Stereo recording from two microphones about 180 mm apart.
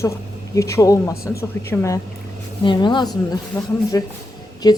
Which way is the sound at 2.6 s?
25° left (ahead or behind).